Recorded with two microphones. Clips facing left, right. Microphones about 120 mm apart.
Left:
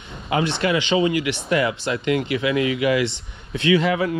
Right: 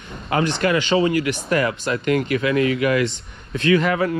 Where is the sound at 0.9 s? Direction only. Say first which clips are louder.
Right 1 dB; 40° right (ahead or behind).